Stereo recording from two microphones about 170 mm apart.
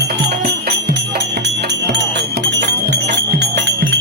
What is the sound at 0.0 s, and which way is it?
Music, 75° right (ahead or behind).